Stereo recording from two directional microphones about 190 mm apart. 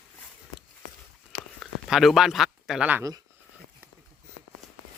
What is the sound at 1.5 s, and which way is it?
Speech, centre (ahead or behind).